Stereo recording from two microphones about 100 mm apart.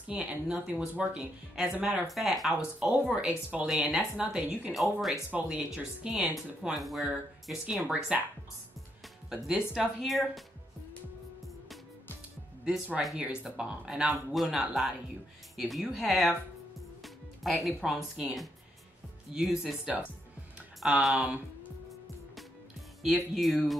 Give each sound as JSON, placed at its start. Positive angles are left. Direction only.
{"t": 0.0, "sound": "speech", "side_deg": -10}
{"t": 2.0, "sound": "speech", "side_deg": 0}
{"t": 7.8, "sound": "speech", "side_deg": -15}
{"t": 9.3, "sound": "speech", "side_deg": -5}
{"t": 12.6, "sound": "speech", "side_deg": -10}
{"t": 17.0, "sound": "music", "side_deg": 0}
{"t": 17.8, "sound": "speech", "side_deg": -5}
{"t": 23.0, "sound": "speech", "side_deg": 0}